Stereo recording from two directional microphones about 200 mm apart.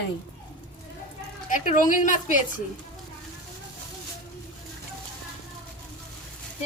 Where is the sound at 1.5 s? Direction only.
40° left (ahead or behind).